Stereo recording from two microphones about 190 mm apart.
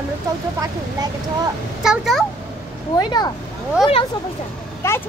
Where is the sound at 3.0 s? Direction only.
20° left (ahead or behind).